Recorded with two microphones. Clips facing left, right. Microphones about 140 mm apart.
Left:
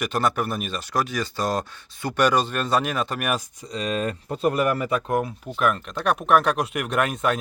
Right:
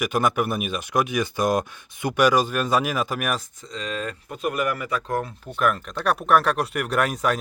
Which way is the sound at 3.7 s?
20° left (ahead or behind).